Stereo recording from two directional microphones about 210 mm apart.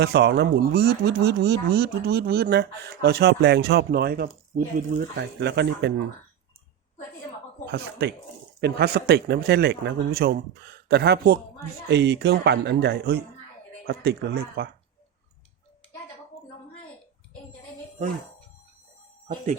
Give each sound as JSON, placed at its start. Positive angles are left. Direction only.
{"t": 0.0, "sound": "speech", "side_deg": -55}
{"t": 7.7, "sound": "speech", "side_deg": -55}